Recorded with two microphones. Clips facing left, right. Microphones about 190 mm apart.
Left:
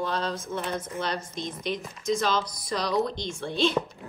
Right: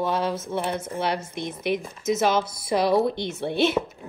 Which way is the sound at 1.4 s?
60° right (ahead or behind).